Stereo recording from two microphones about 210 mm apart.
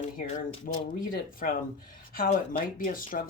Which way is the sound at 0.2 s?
40° left (ahead or behind).